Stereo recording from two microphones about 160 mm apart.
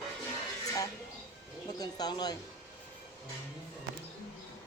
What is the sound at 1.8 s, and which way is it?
Speech, 25° left (ahead or behind).